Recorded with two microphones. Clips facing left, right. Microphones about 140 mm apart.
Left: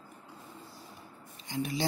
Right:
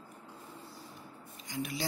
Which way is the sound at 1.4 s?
30° left (ahead or behind).